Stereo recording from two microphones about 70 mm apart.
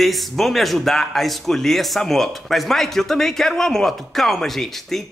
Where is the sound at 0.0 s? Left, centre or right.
Centre.